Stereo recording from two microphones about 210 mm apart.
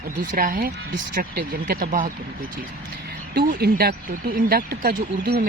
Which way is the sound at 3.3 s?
50° right (ahead or behind).